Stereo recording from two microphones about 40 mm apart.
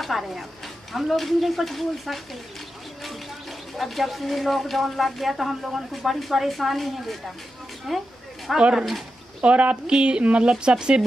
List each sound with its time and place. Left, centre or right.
0.0 s speech: centre
3.7 s speech: centre
9.4 s speech: right
9.8 s speech: right